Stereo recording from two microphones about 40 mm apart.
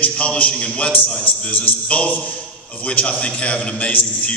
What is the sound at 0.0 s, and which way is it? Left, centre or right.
Speech, left.